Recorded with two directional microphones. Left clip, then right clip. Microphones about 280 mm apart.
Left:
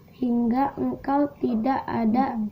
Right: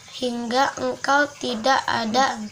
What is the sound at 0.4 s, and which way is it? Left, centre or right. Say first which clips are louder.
Speech: right 6 dB; right.